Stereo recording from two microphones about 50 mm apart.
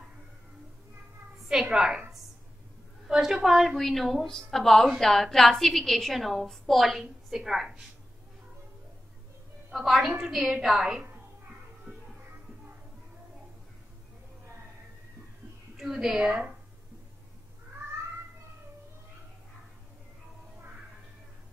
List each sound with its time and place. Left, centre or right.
1.5 s a woman's voice: centre
3.1 s a sound: centre
3.4 s a woman's voice: centre
9.7 s a woman's voice: centre
15.8 s a woman's voice: centre
16.2 s a woman's voice: right